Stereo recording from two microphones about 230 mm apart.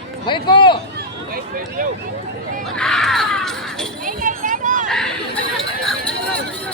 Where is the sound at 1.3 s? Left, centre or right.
Right.